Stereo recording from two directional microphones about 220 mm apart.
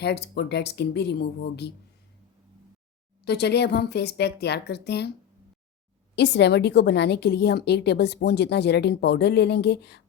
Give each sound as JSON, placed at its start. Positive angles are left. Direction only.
{"t": 0.0, "sound": "a woman's voice", "side_deg": 50}
{"t": 3.2, "sound": "a woman's voice", "side_deg": 50}
{"t": 6.1, "sound": "a woman's voice", "side_deg": 50}